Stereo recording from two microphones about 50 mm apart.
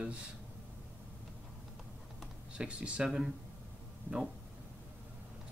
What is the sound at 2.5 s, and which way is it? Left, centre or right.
Speech, right.